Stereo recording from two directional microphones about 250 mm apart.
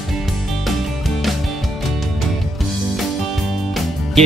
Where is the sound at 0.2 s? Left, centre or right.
Centre.